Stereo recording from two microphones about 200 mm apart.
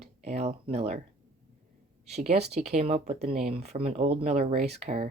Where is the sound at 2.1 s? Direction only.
30° right (ahead or behind).